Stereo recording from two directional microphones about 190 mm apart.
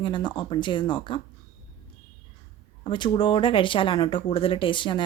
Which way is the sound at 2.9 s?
25° left (ahead or behind).